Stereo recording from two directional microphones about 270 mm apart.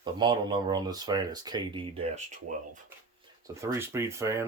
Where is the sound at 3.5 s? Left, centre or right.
Centre.